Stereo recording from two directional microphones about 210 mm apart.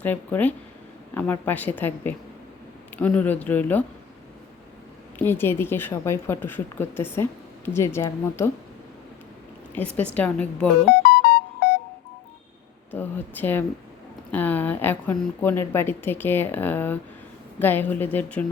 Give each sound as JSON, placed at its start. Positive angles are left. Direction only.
{"t": 0.0, "sound": "a woman's voice", "side_deg": 10}
{"t": 5.2, "sound": "a woman's voice", "side_deg": 10}
{"t": 9.7, "sound": "a woman's voice", "side_deg": 5}
{"t": 11.0, "sound": "music", "side_deg": 50}
{"t": 12.9, "sound": "a woman's voice", "side_deg": 10}